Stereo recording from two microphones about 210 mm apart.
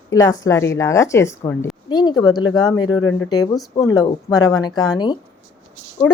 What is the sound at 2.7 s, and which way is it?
Speech, 80° left.